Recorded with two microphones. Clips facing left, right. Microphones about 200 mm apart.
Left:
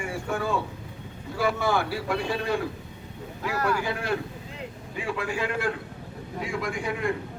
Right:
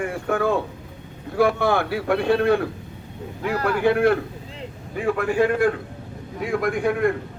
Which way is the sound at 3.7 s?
60° right (ahead or behind).